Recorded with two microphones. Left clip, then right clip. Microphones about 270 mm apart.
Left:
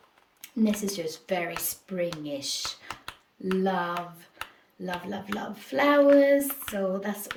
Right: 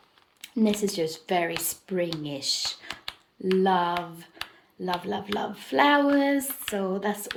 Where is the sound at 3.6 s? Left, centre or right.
Centre.